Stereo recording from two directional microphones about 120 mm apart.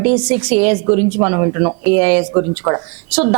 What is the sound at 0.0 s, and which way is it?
Speech, 15° right (ahead or behind).